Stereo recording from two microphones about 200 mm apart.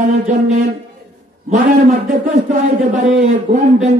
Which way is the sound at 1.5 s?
40° right (ahead or behind).